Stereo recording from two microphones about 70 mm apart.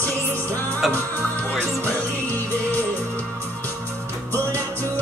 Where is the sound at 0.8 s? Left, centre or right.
Centre.